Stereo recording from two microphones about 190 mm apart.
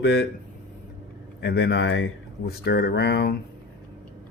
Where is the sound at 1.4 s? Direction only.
65° left (ahead or behind).